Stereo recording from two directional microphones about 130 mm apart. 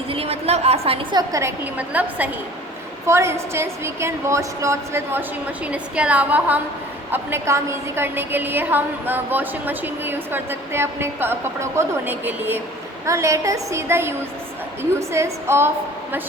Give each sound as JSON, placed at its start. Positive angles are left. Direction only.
{"t": 0.1, "sound": "a sound", "side_deg": -50}
{"t": 1.1, "sound": "a woman's voice", "side_deg": -25}
{"t": 1.9, "sound": "a woman's voice", "side_deg": -15}
{"t": 5.6, "sound": "a woman's voice", "side_deg": -10}